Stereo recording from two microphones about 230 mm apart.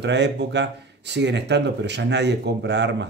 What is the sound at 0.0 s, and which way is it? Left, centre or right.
Speech, right.